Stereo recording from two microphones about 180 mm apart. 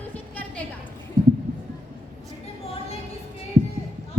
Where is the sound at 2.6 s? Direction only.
35° left (ahead or behind).